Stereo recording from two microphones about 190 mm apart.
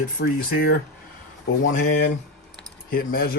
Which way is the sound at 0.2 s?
55° left (ahead or behind).